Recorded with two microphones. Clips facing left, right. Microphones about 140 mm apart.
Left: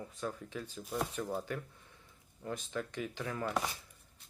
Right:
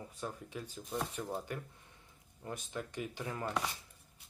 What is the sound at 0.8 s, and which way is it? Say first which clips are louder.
Speech: left 2 dB; 5° left (ahead or behind).